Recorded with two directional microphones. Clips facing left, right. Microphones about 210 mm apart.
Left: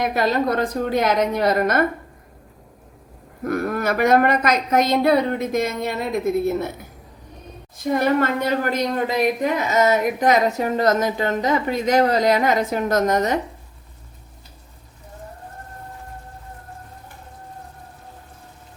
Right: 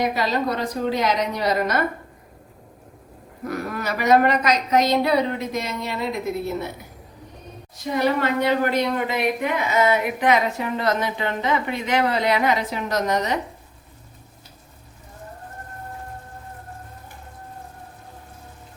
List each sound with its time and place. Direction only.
0.0 s a woman's voice: 50° left (ahead or behind)
3.4 s a woman's voice: 50° left (ahead or behind)
7.9 s a woman's voice: 50° left (ahead or behind)